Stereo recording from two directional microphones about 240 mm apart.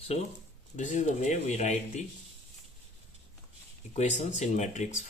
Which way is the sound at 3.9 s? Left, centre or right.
Left.